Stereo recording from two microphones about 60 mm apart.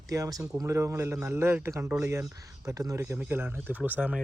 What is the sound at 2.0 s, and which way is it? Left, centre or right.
Speech, right.